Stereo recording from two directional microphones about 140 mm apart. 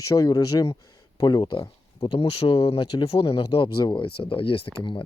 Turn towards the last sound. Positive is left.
turn(degrees=35)  # may be behind; listen again after turning